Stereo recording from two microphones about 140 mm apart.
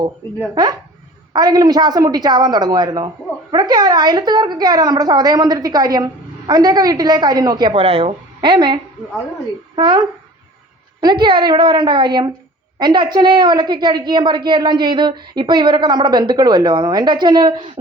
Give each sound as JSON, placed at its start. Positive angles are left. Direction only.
{"t": 0.5, "sound": "a woman's voice", "side_deg": -30}
{"t": 11.0, "sound": "a woman's voice", "side_deg": -35}